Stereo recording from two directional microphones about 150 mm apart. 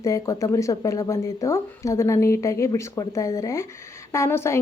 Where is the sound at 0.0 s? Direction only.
20° left (ahead or behind).